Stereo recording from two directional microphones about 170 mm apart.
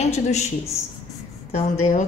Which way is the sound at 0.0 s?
40° left (ahead or behind).